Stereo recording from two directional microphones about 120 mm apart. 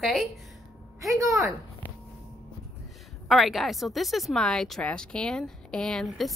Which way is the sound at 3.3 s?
Centre (ahead or behind).